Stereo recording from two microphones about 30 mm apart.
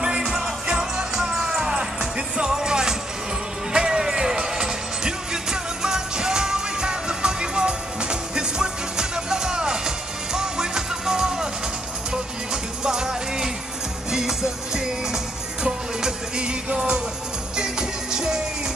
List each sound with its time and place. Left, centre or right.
0.0 s music: right
12.8 s music: centre